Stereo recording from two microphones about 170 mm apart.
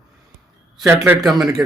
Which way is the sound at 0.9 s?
15° right (ahead or behind).